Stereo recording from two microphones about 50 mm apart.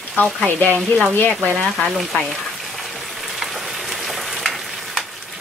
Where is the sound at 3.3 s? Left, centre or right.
Centre.